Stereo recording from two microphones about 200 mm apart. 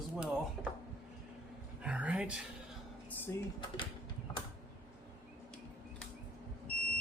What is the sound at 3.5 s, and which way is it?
Speech, 25° left (ahead or behind).